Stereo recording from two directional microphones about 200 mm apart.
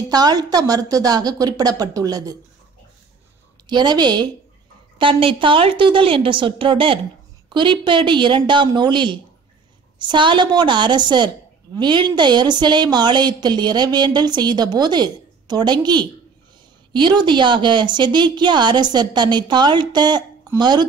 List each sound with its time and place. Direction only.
0.1 s a woman's voice: 20° right (ahead or behind)
3.6 s a woman's voice: 20° right (ahead or behind)